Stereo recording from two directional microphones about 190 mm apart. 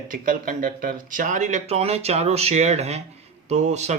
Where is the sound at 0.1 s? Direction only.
45° right (ahead or behind).